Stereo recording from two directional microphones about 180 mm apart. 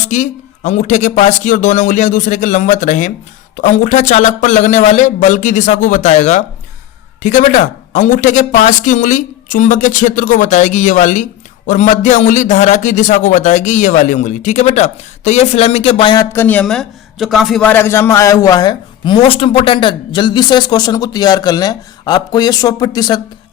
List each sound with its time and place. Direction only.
0.1 s speech: 40° left (ahead or behind)
16.3 s a man's voice: 10° left (ahead or behind)